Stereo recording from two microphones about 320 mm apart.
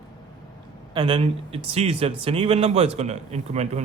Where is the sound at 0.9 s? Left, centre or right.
Centre.